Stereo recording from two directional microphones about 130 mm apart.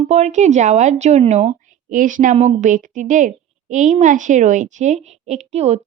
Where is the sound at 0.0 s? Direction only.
60° right (ahead or behind).